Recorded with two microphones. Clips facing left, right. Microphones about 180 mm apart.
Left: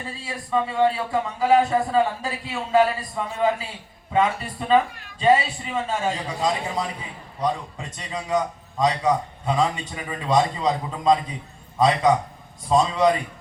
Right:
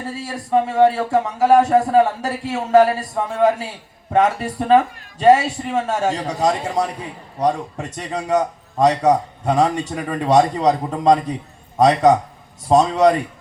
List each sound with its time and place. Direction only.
0.0 s a man's voice: 70° right (ahead or behind)
2.9 s a man's voice: 60° right (ahead or behind)